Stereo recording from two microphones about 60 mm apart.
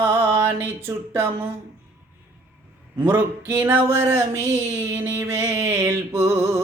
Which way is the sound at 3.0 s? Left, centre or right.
Right.